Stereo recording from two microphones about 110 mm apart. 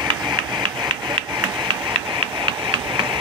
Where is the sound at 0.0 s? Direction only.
45° right (ahead or behind).